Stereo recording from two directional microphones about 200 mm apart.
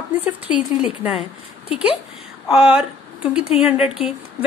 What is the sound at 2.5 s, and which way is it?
A woman's voice, 5° right (ahead or behind).